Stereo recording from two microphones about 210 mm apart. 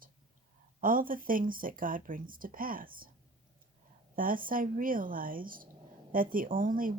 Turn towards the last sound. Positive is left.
turn(degrees=-40)  # may be behind; listen again after turning